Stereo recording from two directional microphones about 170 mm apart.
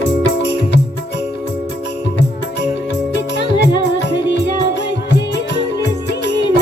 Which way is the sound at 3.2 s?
90° left.